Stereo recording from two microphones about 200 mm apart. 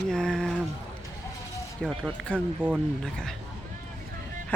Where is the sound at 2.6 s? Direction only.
10° right (ahead or behind).